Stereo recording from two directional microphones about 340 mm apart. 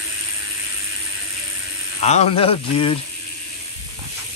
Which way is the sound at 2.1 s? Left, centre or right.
Centre.